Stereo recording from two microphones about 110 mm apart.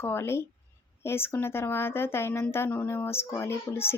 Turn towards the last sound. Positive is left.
turn(degrees=20)  # may be behind; listen again after turning